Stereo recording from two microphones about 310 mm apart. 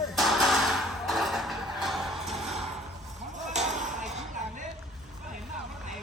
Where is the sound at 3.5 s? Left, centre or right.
Right.